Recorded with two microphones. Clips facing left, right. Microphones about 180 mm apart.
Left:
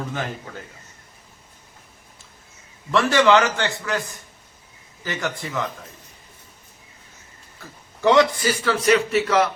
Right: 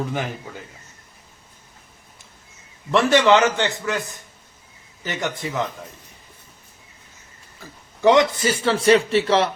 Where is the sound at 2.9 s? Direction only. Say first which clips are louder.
Right 1 dB; 20° right (ahead or behind).